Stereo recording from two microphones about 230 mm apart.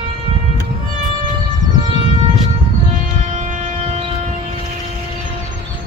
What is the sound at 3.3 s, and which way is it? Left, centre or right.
Train, right.